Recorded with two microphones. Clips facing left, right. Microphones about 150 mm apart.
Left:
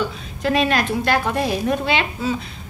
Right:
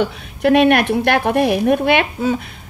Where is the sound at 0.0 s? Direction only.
65° right (ahead or behind).